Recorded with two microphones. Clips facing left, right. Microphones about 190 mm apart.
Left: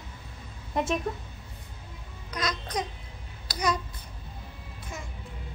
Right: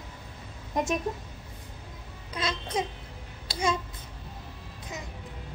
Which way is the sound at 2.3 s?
25° right (ahead or behind).